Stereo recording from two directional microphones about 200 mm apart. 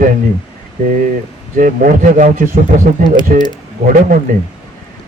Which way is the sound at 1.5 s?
45° right (ahead or behind).